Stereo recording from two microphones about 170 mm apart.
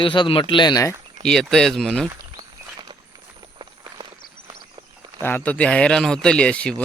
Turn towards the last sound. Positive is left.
turn(degrees=5)  # may be behind; listen again after turning